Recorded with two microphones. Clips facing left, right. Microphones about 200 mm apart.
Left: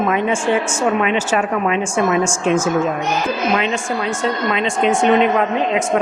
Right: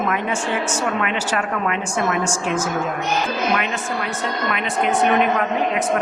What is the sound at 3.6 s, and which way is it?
A woman's voice, 20° left (ahead or behind).